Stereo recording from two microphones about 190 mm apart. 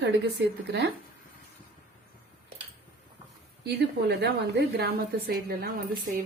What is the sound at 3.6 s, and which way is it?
A woman's voice, 60° right (ahead or behind).